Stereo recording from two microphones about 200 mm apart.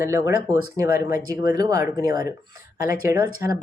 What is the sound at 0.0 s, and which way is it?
Speech, 15° right (ahead or behind).